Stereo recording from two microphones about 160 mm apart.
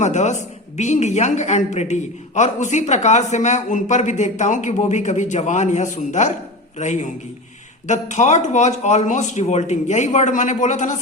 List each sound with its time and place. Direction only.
0.0 s a woman's voice: 45° left (ahead or behind)